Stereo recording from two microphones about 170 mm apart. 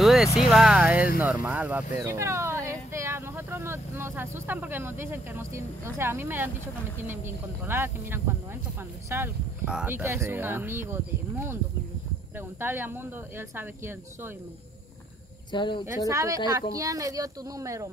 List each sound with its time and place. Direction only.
0.0 s vehicle: centre (ahead or behind)
0.4 s speech: centre (ahead or behind)
15.5 s speech: 25° left (ahead or behind)
16.1 s speech: 20° right (ahead or behind)